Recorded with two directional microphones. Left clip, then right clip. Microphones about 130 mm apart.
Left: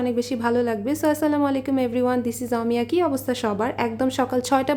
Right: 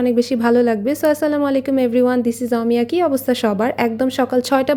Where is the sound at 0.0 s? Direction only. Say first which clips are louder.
Right 7 dB; 35° right (ahead or behind).